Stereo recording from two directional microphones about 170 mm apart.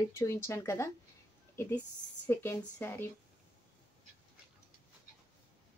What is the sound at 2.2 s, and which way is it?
Speech, 15° left (ahead or behind).